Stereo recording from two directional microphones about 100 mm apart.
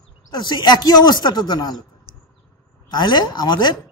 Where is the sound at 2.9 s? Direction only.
45° left (ahead or behind).